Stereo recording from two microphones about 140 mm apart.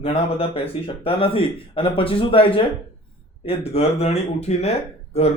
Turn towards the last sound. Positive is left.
turn(degrees=50)  # may be behind; listen again after turning